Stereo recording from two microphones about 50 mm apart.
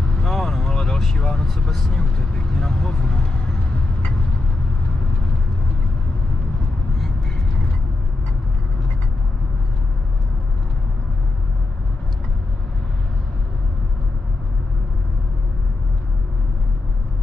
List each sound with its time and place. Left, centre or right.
0.2 s vehicle: centre